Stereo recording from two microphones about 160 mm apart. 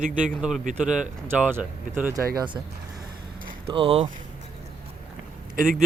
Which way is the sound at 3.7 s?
35° right (ahead or behind).